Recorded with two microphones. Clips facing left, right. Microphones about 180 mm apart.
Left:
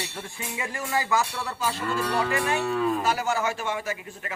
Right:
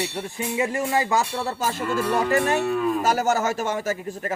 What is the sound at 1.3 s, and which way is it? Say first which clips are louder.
Speech: right 4 dB; 40° right (ahead or behind).